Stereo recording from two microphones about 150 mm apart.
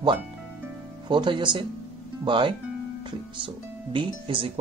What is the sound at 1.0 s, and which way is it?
Speech, 30° right (ahead or behind).